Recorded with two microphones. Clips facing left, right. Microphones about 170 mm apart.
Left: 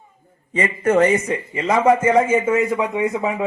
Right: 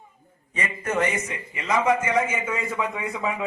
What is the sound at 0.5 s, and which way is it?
A man's voice, 55° left (ahead or behind).